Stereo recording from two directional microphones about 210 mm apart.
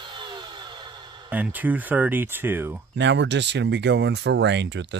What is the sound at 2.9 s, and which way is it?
Speech, 60° right (ahead or behind).